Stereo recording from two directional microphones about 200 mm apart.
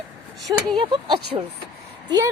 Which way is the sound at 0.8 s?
25° right (ahead or behind).